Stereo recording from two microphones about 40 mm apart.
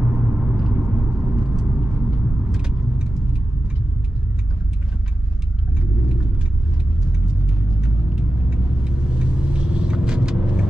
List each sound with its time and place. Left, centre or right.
0.0 s vehicle: right
2.5 s vehicle: centre
7.1 s vehicle: centre